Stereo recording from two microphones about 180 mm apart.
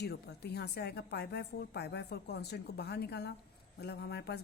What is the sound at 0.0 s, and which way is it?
A woman's voice, 65° left (ahead or behind).